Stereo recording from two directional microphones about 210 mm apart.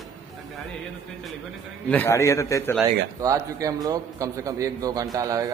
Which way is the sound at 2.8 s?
15° right (ahead or behind).